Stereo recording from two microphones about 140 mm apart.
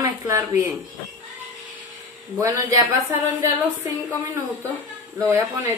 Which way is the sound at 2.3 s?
25° right (ahead or behind).